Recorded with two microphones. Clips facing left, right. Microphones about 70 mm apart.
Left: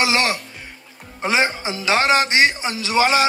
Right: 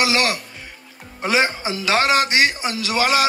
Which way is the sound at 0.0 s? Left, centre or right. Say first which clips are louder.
Even; left.